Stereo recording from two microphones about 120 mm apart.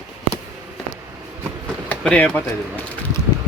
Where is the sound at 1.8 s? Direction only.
10° left (ahead or behind).